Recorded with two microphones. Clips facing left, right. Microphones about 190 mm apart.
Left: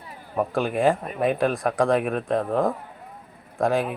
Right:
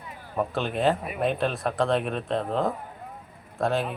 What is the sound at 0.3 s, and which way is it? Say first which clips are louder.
Speech: left 4 dB; 10° left (ahead or behind).